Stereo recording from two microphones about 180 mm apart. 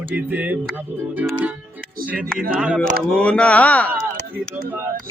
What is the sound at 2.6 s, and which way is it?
Speech, 5° right (ahead or behind).